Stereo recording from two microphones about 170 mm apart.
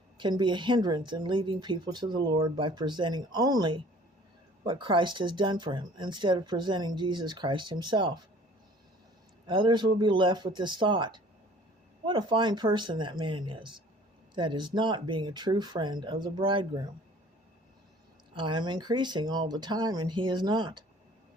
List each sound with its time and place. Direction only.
0.2 s speech: 25° right (ahead or behind)
9.5 s speech: 30° right (ahead or behind)
18.3 s speech: 25° right (ahead or behind)